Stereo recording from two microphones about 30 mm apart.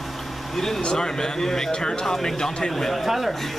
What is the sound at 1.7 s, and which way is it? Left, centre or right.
Speech, left.